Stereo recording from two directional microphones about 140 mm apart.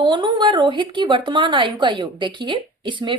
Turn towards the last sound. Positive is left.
turn(degrees=-35)  # may be behind; listen again after turning